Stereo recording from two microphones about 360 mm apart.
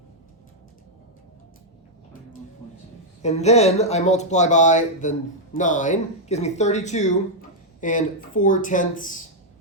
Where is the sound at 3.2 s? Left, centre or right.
Centre.